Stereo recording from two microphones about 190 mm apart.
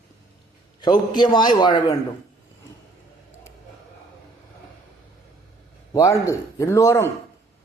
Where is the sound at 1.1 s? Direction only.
20° left (ahead or behind).